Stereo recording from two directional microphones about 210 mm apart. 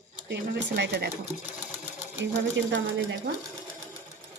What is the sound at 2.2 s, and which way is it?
Speech, 60° right (ahead or behind).